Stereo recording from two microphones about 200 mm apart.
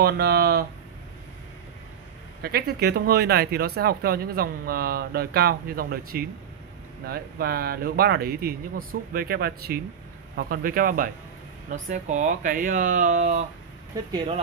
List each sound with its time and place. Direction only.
0.0 s speech: 50° right (ahead or behind)
2.4 s speech: 50° right (ahead or behind); by 14.4 s 30° right (ahead or behind)